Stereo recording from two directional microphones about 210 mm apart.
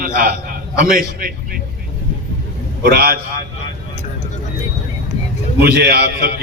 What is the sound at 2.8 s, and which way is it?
Speech, 45° right (ahead or behind).